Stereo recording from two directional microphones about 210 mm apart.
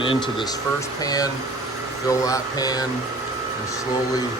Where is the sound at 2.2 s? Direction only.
15° left (ahead or behind).